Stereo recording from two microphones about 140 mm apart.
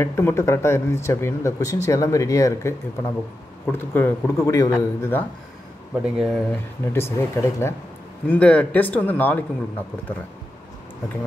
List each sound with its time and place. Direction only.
0.0 s speech: 20° left (ahead or behind)
6.0 s speech: 5° right (ahead or behind)
6.8 s speech: 15° left (ahead or behind)